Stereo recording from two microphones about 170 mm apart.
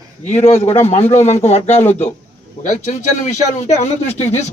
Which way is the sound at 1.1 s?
40° left (ahead or behind).